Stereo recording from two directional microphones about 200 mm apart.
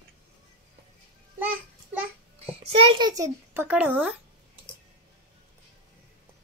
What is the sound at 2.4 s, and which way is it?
A child's voice, 30° right (ahead or behind).